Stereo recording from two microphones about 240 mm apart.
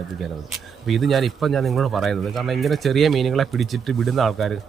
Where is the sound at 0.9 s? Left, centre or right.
Centre.